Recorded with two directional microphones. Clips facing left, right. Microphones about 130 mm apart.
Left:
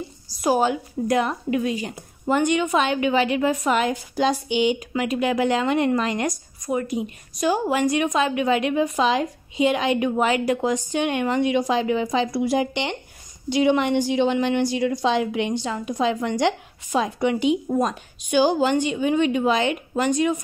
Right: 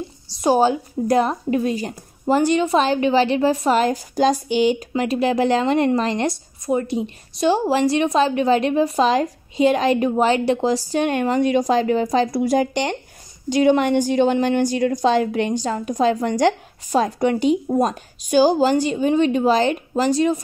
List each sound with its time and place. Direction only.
0.3 s a woman's voice: 30° right (ahead or behind)